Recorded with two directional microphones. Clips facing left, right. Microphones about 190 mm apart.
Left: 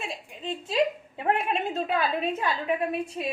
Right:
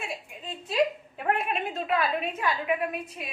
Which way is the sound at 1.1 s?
25° left (ahead or behind).